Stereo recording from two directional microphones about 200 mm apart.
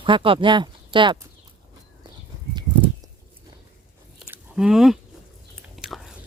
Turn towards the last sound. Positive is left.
turn(degrees=0)  # may be behind; listen again after turning